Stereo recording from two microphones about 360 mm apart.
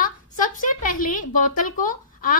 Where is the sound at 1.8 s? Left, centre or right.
Left.